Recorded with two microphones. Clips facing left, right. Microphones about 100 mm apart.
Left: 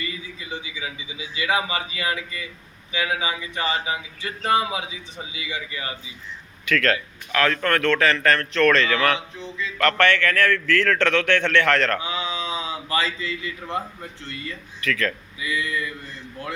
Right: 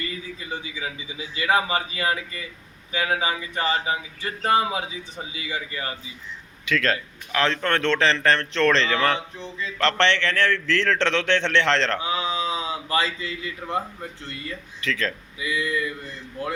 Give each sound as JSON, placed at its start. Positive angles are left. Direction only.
{"t": 0.0, "sound": "a man's voice", "side_deg": -40}
{"t": 6.7, "sound": "a man's voice", "side_deg": -20}
{"t": 9.6, "sound": "a man's voice", "side_deg": -35}
{"t": 9.8, "sound": "a man's voice", "side_deg": -25}
{"t": 14.8, "sound": "a man's voice", "side_deg": -25}